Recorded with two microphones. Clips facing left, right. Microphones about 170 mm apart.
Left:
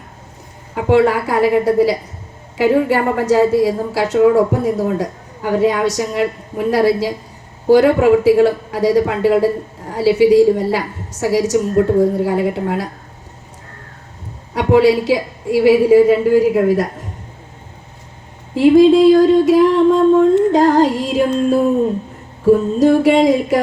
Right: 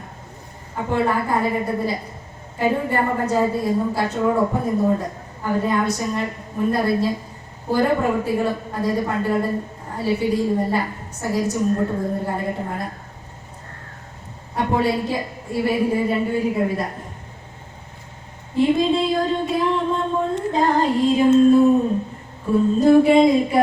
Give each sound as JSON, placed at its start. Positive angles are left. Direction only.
{"t": 0.8, "sound": "a woman's voice", "side_deg": 90}
{"t": 14.5, "sound": "a woman's voice", "side_deg": 90}
{"t": 18.5, "sound": "a woman's voice", "side_deg": 90}
{"t": 22.4, "sound": "a woman's voice", "side_deg": 90}